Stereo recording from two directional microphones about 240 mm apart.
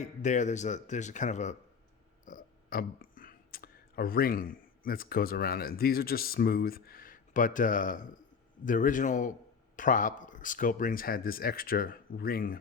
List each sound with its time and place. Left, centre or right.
0.0 s speech: left